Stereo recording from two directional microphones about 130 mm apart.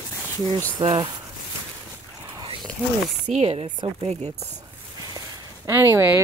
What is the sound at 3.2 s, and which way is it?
Chopping, 60° right (ahead or behind).